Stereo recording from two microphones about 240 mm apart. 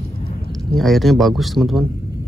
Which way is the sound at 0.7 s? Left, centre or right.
Centre.